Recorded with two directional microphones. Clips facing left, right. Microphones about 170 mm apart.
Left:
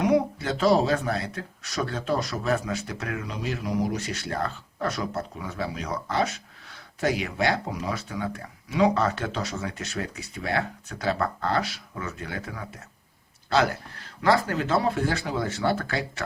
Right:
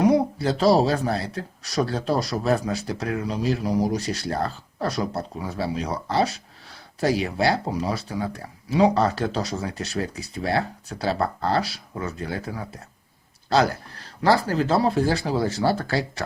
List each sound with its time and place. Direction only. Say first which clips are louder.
0.0 s speech: right 3 dB; 35° right (ahead or behind)